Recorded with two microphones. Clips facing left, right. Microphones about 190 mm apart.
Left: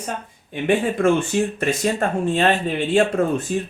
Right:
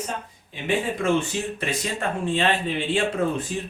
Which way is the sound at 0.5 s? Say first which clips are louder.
Left 6 dB; 50° left (ahead or behind).